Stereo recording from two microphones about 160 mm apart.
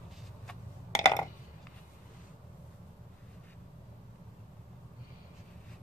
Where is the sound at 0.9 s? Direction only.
20° left (ahead or behind).